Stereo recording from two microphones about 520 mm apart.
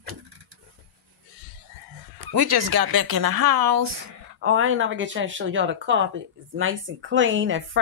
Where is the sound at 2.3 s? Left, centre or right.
Right.